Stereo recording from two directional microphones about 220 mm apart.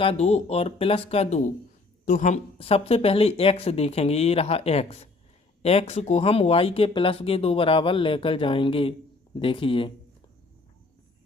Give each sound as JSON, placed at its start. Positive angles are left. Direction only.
{"t": 0.0, "sound": "speech", "side_deg": 30}